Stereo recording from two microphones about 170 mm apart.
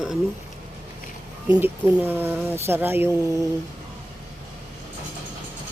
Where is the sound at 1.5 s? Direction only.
10° right (ahead or behind).